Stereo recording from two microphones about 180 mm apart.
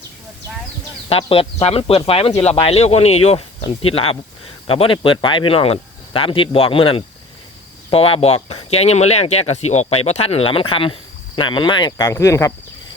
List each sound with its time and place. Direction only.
1.1 s speech: 30° left (ahead or behind); by 12.5 s 15° left (ahead or behind)